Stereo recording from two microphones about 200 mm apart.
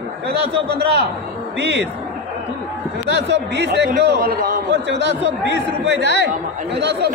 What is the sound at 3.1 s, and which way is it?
A man's voice, 60° right (ahead or behind).